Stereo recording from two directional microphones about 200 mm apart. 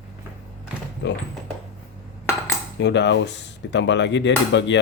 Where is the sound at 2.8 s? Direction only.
60° left (ahead or behind).